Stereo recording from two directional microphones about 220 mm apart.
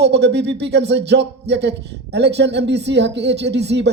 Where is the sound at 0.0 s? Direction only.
50° right (ahead or behind).